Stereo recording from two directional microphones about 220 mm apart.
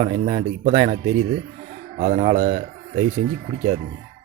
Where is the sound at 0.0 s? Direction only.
30° right (ahead or behind).